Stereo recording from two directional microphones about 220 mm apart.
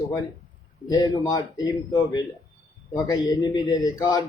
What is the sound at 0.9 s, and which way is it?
A man's voice, 15° left (ahead or behind).